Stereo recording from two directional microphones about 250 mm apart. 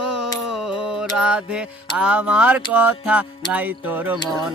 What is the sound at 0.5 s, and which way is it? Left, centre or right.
Mantra, centre.